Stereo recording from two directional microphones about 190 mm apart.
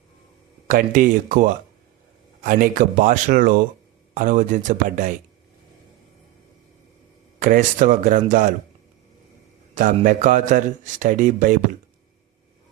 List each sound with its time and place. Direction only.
0.7 s a man's voice: 45° right (ahead or behind)
7.3 s a man's voice: 45° right (ahead or behind)
9.7 s a man's voice: 45° right (ahead or behind)